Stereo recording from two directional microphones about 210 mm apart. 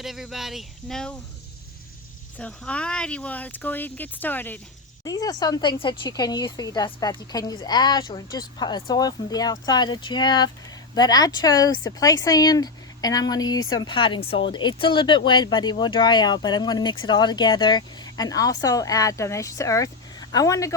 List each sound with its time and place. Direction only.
0.0 s speech: centre (ahead or behind)
2.4 s speech: 5° left (ahead or behind)